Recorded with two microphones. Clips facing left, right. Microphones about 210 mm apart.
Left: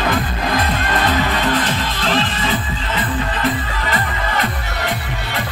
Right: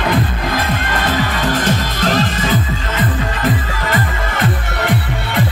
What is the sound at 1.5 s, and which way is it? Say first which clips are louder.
Music: right 2 dB; 45° right (ahead or behind).